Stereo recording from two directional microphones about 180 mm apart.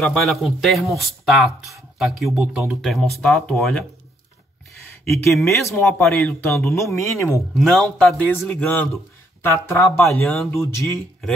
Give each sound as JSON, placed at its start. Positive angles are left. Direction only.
{"t": 0.0, "sound": "speech", "side_deg": 0}
{"t": 5.4, "sound": "speech", "side_deg": 15}
{"t": 6.7, "sound": "speech", "side_deg": 15}
{"t": 7.5, "sound": "speech", "side_deg": 0}